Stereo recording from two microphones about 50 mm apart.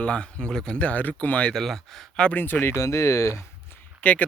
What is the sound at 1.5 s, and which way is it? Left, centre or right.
Speech, centre.